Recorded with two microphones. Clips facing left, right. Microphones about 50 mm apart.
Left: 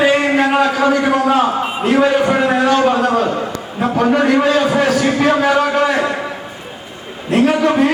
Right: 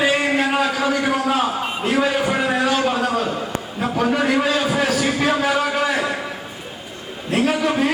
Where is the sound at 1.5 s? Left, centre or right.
Centre.